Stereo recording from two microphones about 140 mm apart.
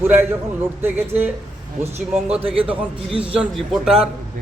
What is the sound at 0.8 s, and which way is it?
Speech, 15° right (ahead or behind).